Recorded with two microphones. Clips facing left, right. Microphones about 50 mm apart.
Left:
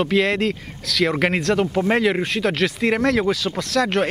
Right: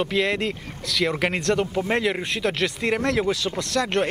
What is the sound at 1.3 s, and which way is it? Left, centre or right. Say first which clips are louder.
Speech: left 3 dB; centre.